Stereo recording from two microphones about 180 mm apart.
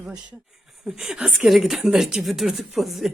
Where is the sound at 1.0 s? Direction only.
5° right (ahead or behind).